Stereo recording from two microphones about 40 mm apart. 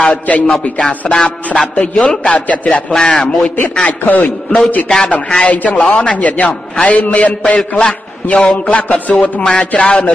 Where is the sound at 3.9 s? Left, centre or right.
Left.